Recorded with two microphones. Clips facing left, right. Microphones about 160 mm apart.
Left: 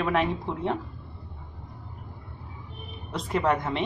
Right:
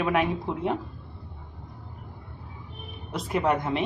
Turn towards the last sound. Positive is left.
turn(degrees=-20)  # may be behind; listen again after turning